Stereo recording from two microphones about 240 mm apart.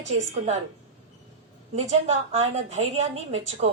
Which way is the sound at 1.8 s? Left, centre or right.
Right.